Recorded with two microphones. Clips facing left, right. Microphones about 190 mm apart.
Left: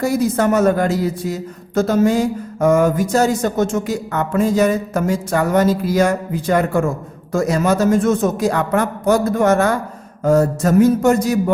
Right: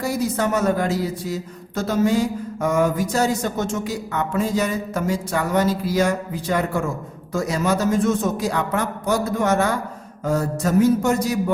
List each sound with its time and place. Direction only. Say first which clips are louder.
0.0 s a man's voice: left 6 dB; 50° left (ahead or behind)